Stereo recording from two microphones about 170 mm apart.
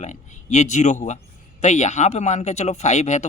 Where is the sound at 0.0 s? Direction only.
45° left (ahead or behind).